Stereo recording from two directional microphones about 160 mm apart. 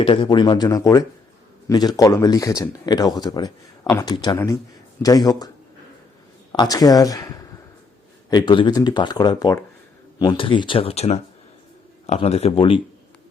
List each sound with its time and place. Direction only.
0.0 s speech: 30° left (ahead or behind)
6.5 s speech: 25° left (ahead or behind)